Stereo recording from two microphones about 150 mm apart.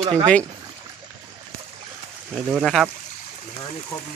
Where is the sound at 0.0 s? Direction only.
25° right (ahead or behind).